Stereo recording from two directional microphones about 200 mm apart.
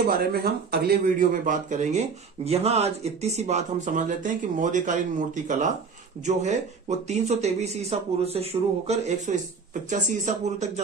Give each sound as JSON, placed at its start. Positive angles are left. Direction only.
{"t": 0.0, "sound": "a man's voice", "side_deg": -50}